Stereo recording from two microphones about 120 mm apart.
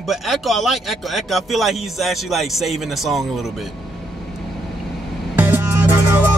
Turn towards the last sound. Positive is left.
turn(degrees=-20)  # may be behind; listen again after turning